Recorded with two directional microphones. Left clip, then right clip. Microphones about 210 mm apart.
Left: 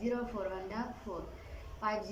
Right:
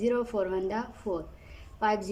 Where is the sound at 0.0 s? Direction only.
45° right (ahead or behind).